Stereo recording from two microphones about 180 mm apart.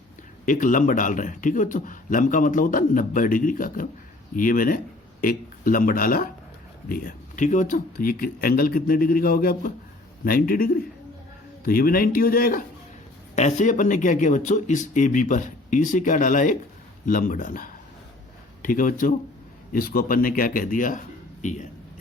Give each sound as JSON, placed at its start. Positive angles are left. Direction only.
{"t": 0.4, "sound": "a man's voice", "side_deg": 50}
{"t": 13.3, "sound": "a man's voice", "side_deg": 40}